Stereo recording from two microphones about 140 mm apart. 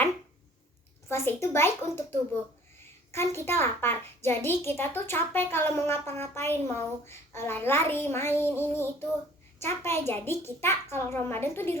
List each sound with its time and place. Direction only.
1.1 s a child's voice: 20° left (ahead or behind)